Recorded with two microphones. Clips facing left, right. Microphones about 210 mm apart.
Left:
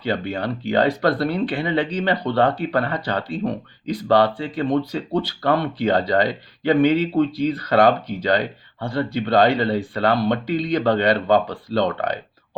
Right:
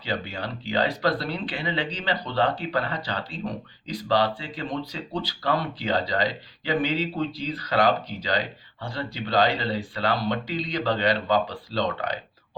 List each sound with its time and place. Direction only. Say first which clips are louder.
0.0 s speech: left 7 dB; 55° left (ahead or behind)